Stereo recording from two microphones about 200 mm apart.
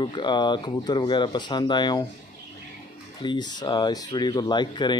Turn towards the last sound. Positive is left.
turn(degrees=20)  # may be behind; listen again after turning